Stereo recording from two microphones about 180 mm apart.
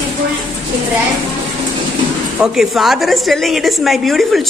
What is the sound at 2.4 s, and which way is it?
A woman's voice, centre (ahead or behind).